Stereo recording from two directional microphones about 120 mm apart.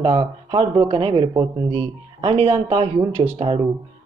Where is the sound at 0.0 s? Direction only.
45° right (ahead or behind).